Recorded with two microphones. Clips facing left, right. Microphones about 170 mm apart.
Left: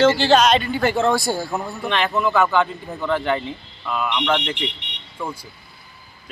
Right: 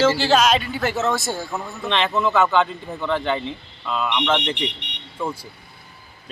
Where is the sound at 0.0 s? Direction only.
5° right (ahead or behind).